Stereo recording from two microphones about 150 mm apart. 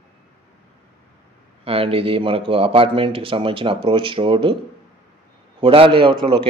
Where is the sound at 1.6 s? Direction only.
40° right (ahead or behind).